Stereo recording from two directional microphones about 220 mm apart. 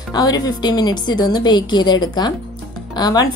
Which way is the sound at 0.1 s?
20° left (ahead or behind).